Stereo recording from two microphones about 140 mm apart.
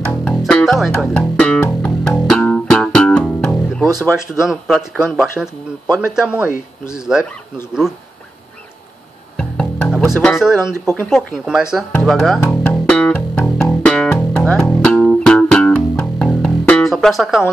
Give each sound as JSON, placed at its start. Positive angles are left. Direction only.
{"t": 0.0, "sound": "music", "side_deg": 5}
{"t": 4.3, "sound": "speech", "side_deg": -5}
{"t": 9.4, "sound": "music", "side_deg": 5}
{"t": 10.3, "sound": "speech", "side_deg": 0}
{"t": 11.9, "sound": "music", "side_deg": 0}